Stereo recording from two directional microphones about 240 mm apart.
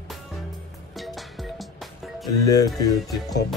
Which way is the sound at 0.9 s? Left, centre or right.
Centre.